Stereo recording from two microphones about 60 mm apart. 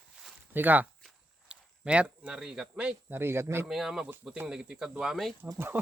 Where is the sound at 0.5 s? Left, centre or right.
Right.